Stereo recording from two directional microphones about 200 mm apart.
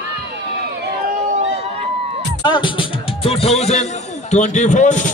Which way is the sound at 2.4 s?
25° left (ahead or behind).